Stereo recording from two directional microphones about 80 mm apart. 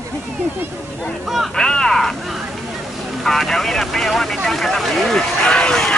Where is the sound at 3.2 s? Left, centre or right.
Centre.